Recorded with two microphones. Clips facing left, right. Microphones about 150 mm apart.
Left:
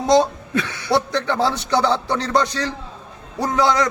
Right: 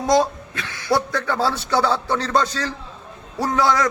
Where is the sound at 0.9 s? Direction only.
25° left (ahead or behind).